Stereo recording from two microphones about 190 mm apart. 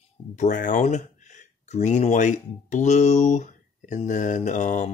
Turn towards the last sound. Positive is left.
turn(degrees=40)  # may be behind; listen again after turning